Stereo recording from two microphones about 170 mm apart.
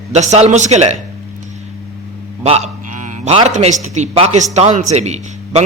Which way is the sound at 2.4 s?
40° right (ahead or behind).